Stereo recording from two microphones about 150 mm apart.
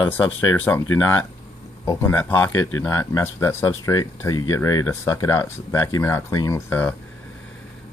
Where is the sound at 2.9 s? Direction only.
25° left (ahead or behind).